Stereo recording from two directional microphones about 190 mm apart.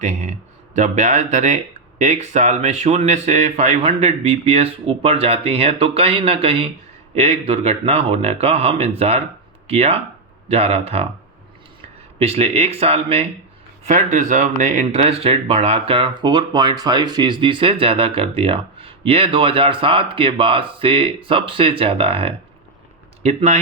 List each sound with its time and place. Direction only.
0.0 s speech: 40° right (ahead or behind)
12.2 s speech: 30° right (ahead or behind)